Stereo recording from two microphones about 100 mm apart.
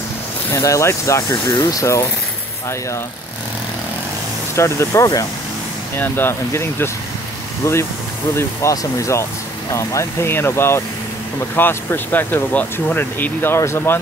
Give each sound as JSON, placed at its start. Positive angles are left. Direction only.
{"t": 0.5, "sound": "speech", "side_deg": 30}
{"t": 4.6, "sound": "speech", "side_deg": 30}
{"t": 5.9, "sound": "speech", "side_deg": 20}